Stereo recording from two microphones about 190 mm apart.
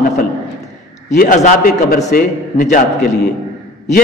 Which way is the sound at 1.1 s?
50° left (ahead or behind).